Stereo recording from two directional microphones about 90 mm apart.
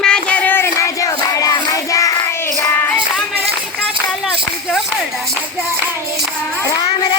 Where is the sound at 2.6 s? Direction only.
25° left (ahead or behind).